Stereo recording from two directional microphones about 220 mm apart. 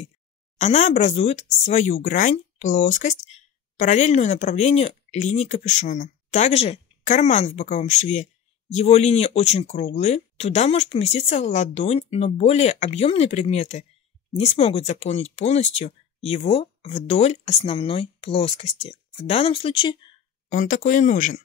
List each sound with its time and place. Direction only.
0.6 s speech: 30° left (ahead or behind)
20.5 s speech: 35° left (ahead or behind)